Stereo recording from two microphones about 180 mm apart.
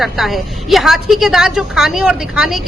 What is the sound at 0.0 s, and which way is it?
A woman's voice, centre (ahead or behind).